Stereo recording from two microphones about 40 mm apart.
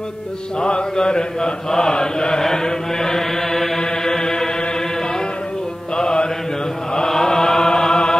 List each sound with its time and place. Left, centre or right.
0.6 s mantra: left
2.4 s chant: centre
5.9 s mantra: left
7.1 s chant: centre